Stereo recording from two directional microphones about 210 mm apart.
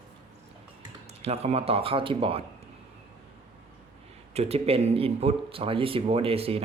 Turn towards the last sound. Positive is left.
turn(degrees=-30)  # may be behind; listen again after turning